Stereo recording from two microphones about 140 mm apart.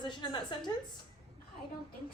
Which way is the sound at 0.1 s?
35° left (ahead or behind).